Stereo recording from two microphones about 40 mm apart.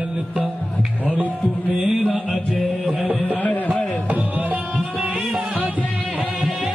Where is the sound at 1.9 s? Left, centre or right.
Right.